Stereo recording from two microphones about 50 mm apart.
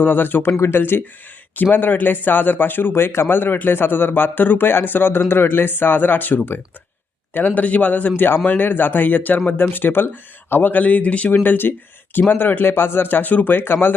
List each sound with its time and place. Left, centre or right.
0.0 s a man's voice: left
11.4 s a man's voice: left